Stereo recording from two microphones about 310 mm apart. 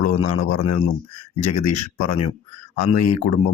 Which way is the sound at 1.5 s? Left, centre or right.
Left.